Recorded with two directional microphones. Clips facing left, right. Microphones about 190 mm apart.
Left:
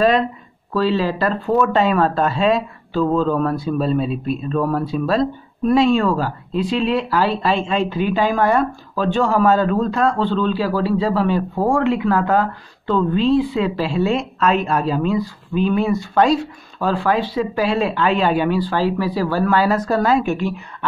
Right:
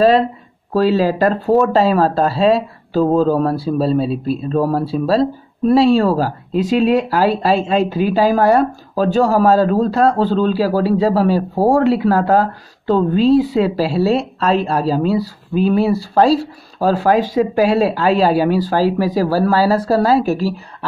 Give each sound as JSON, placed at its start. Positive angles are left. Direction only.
{"t": 0.0, "sound": "speech", "side_deg": -35}